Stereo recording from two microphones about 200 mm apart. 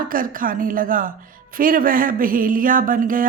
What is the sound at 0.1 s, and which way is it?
Speech, 45° right (ahead or behind).